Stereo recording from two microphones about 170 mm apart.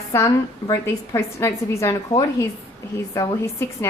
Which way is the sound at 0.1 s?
15° left (ahead or behind).